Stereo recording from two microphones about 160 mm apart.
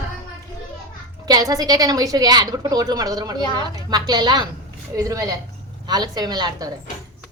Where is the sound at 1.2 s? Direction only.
25° right (ahead or behind).